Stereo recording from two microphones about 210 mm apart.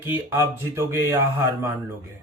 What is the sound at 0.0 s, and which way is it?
Speech, 10° right (ahead or behind).